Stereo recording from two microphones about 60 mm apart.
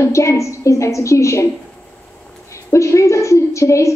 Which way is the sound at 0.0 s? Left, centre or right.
Left.